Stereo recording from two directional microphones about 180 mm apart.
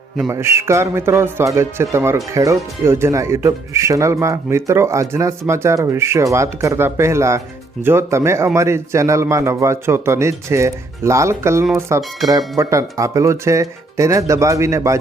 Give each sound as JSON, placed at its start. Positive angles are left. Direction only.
{"t": 0.3, "sound": "a man's voice", "side_deg": -15}